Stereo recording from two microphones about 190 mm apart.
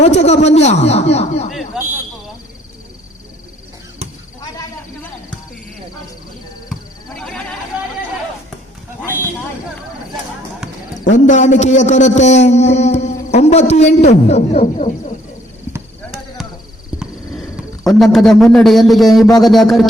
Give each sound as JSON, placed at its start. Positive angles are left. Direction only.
{"t": 0.0, "sound": "a man's voice", "side_deg": 35}
{"t": 1.5, "sound": "a man's voice", "side_deg": 0}
{"t": 7.2, "sound": "a sound", "side_deg": 0}
{"t": 11.0, "sound": "a man's voice", "side_deg": 40}
{"t": 17.8, "sound": "a man's voice", "side_deg": 0}